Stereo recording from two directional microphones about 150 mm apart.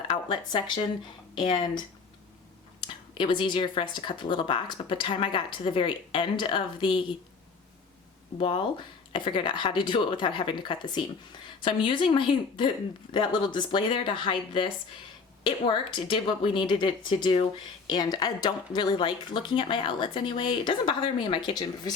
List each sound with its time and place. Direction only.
0.3 s speech: 30° left (ahead or behind)
2.8 s speech: 30° left (ahead or behind)
8.4 s speech: 35° left (ahead or behind)